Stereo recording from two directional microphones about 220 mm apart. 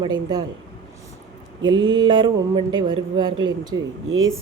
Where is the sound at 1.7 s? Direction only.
65° right (ahead or behind).